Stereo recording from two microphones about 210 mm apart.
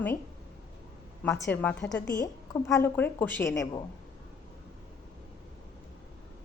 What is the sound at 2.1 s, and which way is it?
A woman's voice, 15° left (ahead or behind).